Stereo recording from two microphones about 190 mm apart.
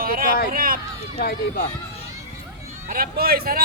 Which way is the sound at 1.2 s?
50° left (ahead or behind).